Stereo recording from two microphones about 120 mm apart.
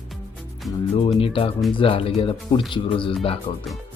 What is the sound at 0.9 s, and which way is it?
Speech, 50° left (ahead or behind).